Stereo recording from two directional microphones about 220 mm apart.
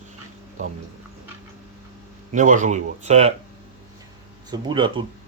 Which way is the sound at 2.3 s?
35° right (ahead or behind).